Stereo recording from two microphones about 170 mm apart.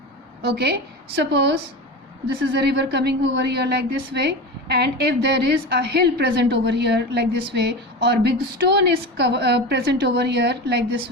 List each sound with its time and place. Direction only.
0.4 s a woman's voice: 75° right (ahead or behind)
2.6 s a woman's voice: 80° right